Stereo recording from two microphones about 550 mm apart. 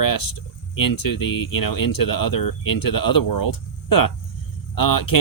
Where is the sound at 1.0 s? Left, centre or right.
Left.